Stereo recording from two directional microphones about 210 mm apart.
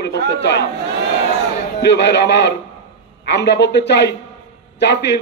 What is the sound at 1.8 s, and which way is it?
A man's voice, 55° left (ahead or behind).